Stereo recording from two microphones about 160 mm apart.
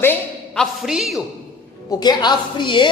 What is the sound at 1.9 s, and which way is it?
A woman's voice, 25° left (ahead or behind).